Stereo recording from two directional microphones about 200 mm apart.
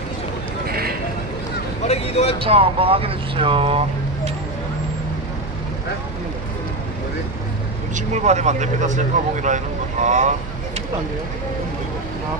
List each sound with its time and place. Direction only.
0.7 s a sound: 50° right (ahead or behind)
1.9 s speech: 30° left (ahead or behind)
2.4 s speech: 25° right (ahead or behind)
7.9 s speech: 35° right (ahead or behind)